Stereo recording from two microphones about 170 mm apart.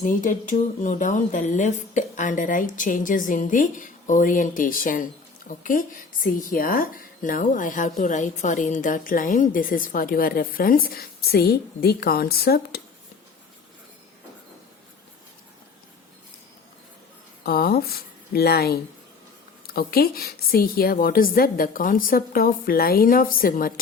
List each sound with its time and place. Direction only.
0.0 s a woman's voice: 50° left (ahead or behind); by 12.8 s 65° left (ahead or behind)
17.4 s a woman's voice: 65° left (ahead or behind)